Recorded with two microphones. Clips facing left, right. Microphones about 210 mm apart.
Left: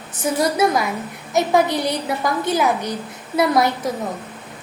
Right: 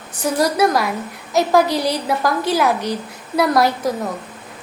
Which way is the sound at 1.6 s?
20° left (ahead or behind).